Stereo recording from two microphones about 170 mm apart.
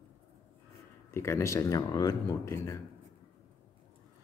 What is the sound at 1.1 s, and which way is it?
Speech, 15° left (ahead or behind).